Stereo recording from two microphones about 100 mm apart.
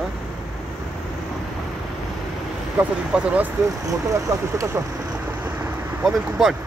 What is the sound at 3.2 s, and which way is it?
Speech, 15° right (ahead or behind).